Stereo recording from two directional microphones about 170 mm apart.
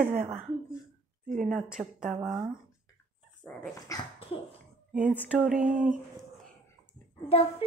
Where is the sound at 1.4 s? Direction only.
5° right (ahead or behind).